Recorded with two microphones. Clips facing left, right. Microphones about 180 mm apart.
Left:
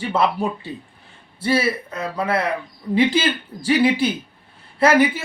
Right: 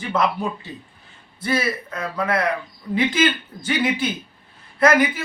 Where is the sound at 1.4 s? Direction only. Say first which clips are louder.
Left 3 dB; 30° left (ahead or behind).